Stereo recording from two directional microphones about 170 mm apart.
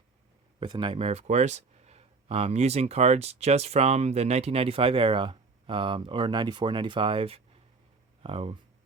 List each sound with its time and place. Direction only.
0.6 s speech: 30° right (ahead or behind)